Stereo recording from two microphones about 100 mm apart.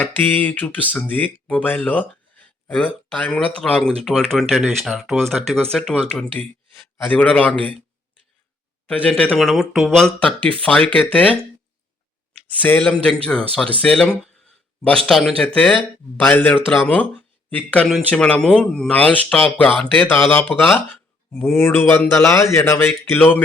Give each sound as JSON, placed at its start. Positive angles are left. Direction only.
{"t": 0.0, "sound": "speech", "side_deg": 15}
{"t": 8.9, "sound": "speech", "side_deg": 10}
{"t": 9.4, "sound": "speech", "side_deg": 0}
{"t": 12.8, "sound": "speech", "side_deg": 5}